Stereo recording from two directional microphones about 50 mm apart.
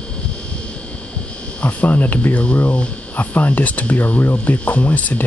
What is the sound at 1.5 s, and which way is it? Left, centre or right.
Speech, left.